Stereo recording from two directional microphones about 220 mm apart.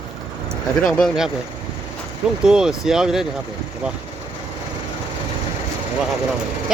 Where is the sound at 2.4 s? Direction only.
5° right (ahead or behind).